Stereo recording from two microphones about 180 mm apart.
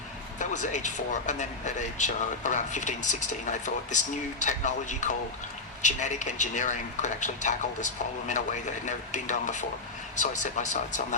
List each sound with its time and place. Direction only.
0.3 s speech: 45° left (ahead or behind)